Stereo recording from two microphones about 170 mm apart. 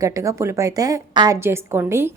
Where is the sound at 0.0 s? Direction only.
20° right (ahead or behind).